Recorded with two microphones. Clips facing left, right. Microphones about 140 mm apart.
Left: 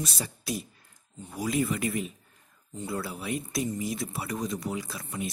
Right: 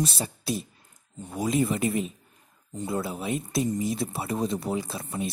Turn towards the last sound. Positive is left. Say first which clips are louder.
# right 3 dB
turn(degrees=-25)  # may be behind; listen again after turning